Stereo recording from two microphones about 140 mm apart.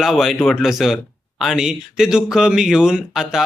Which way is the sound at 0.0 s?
Centre (ahead or behind).